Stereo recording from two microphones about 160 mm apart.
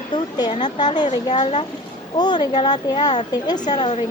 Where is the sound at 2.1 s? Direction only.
25° left (ahead or behind).